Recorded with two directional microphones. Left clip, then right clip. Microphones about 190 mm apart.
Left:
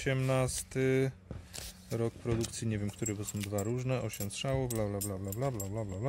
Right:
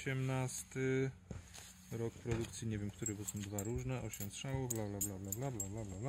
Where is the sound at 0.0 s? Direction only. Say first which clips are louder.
Left 10 dB; 40° left (ahead or behind).